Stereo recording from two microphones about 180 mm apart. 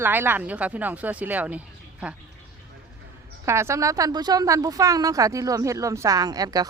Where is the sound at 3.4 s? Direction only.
15° right (ahead or behind).